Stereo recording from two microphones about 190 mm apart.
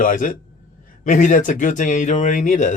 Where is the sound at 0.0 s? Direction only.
45° left (ahead or behind).